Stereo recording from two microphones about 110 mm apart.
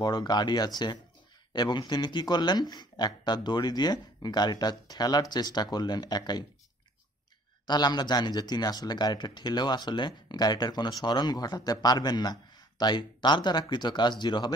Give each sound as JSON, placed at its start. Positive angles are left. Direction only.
{"t": 0.0, "sound": "speech", "side_deg": 40}
{"t": 7.6, "sound": "speech", "side_deg": 40}